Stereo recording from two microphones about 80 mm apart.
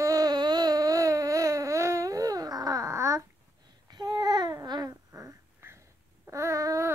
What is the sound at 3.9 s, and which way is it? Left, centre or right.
Babbling, right.